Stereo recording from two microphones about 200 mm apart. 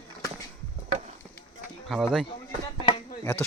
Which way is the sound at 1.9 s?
Centre (ahead or behind).